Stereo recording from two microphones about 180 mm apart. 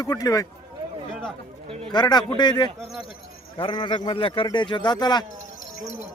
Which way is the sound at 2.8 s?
Centre (ahead or behind).